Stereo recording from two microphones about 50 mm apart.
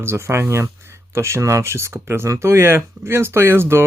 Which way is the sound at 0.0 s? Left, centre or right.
Right.